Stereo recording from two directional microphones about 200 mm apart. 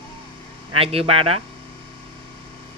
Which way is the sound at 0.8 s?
30° right (ahead or behind).